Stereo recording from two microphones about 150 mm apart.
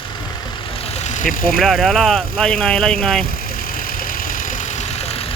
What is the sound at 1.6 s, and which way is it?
Speech, centre (ahead or behind).